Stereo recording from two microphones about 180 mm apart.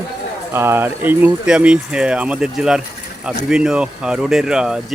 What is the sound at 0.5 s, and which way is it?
Speech, 15° right (ahead or behind).